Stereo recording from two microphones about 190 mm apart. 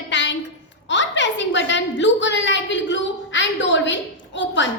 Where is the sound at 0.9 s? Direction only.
70° left (ahead or behind).